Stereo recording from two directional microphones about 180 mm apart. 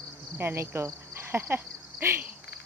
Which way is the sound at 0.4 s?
15° right (ahead or behind).